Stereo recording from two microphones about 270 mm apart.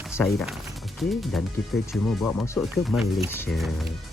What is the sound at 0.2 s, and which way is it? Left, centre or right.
Speech, centre.